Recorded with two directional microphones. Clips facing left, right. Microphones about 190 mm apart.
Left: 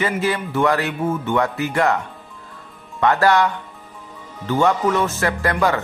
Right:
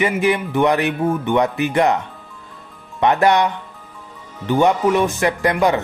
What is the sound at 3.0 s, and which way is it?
Speech, 20° right (ahead or behind).